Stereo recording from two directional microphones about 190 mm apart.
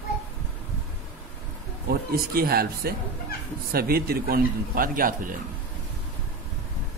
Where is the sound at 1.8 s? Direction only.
55° right (ahead or behind).